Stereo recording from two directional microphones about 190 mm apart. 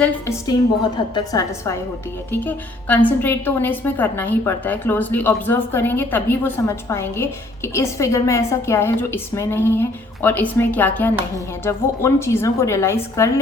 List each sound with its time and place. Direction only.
0.0 s a woman's voice: 15° left (ahead or behind)